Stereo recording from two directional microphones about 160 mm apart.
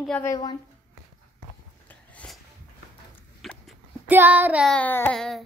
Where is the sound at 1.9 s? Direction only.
10° left (ahead or behind).